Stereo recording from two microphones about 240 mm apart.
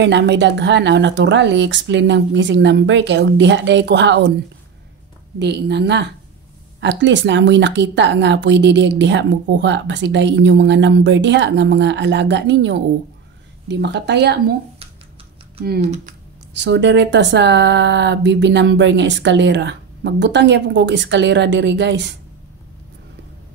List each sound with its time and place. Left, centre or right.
0.0 s a woman's voice: right
5.4 s a woman's voice: right
16.5 s a woman's voice: right